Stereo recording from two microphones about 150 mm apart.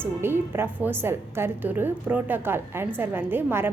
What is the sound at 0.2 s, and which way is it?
A woman's voice, 15° right (ahead or behind).